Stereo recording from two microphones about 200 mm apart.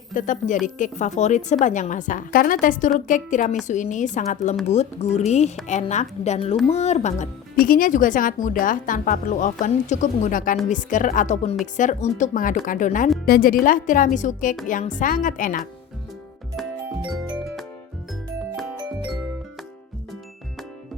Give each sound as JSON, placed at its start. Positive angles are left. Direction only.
{"t": 0.1, "sound": "speech", "side_deg": 40}